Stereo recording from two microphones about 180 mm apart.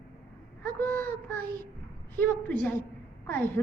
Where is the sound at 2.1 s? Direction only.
10° left (ahead or behind).